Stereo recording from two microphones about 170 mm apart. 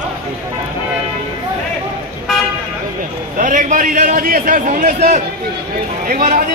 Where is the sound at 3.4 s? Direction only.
50° right (ahead or behind).